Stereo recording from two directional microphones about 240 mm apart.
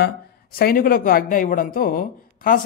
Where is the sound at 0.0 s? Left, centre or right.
Left.